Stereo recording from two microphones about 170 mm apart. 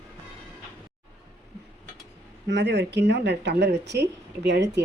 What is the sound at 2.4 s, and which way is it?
Speech, 90° right.